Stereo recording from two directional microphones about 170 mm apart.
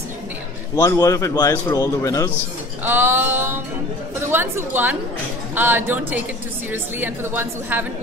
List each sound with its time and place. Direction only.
0.7 s a man's voice: 20° left (ahead or behind)
2.8 s a woman's voice: 10° right (ahead or behind)